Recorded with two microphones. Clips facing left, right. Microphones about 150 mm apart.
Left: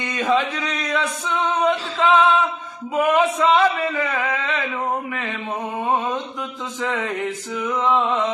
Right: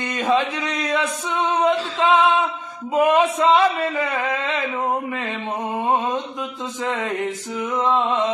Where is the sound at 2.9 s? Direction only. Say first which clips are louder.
Right 1 dB; 20° right (ahead or behind).